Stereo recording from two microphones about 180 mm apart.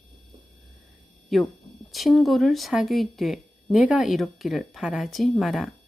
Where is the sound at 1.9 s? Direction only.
Centre (ahead or behind).